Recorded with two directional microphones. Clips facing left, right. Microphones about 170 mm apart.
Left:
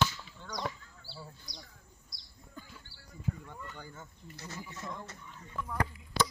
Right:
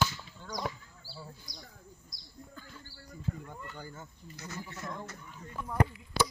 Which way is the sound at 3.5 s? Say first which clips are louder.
Right 2 dB; 10° right (ahead or behind).